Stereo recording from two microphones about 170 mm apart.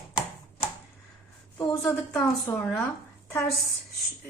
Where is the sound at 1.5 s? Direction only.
20° left (ahead or behind).